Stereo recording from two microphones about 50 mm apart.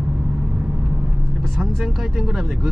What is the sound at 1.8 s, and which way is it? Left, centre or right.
Speech, centre.